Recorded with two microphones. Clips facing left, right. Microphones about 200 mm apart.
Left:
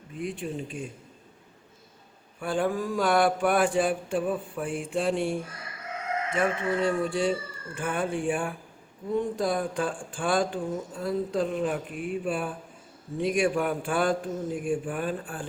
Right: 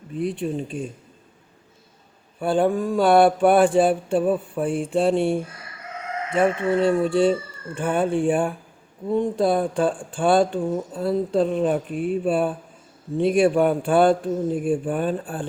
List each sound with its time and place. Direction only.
0.2 s speech: 35° right (ahead or behind)
2.4 s speech: 30° right (ahead or behind)